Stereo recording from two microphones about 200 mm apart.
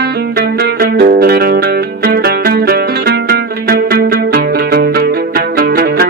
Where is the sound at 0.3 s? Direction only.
50° right (ahead or behind).